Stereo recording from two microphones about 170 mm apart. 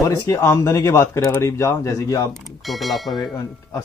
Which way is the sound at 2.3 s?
Centre (ahead or behind).